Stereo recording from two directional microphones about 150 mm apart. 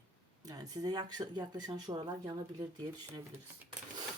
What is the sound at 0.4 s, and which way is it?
Speech, 25° right (ahead or behind).